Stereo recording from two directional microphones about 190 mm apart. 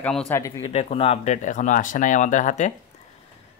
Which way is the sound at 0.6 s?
30° left (ahead or behind).